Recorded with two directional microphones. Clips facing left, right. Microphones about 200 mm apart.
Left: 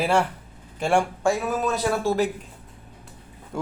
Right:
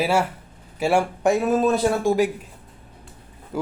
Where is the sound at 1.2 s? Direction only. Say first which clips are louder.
Right 5 dB; 20° right (ahead or behind).